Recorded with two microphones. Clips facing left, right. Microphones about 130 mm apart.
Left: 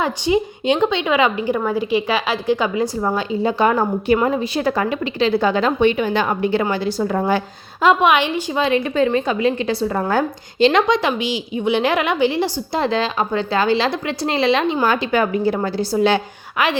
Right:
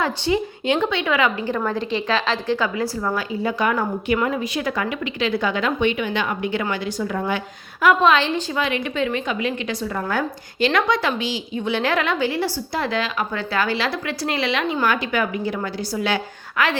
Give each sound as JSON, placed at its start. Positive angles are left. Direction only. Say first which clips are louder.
{"t": 0.0, "sound": "a woman's voice", "louder": "left 3 dB", "side_deg": 20}
{"t": 8.0, "sound": "a woman's voice", "louder": "left 1 dB", "side_deg": 15}
{"t": 8.5, "sound": "a woman's voice", "louder": "left 10 dB", "side_deg": 30}